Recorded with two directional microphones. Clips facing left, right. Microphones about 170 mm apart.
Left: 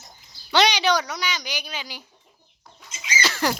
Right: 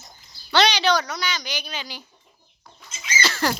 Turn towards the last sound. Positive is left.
turn(degrees=15)  # may be behind; listen again after turning